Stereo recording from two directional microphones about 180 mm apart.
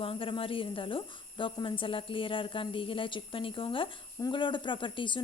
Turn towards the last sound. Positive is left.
turn(degrees=25)  # may be behind; listen again after turning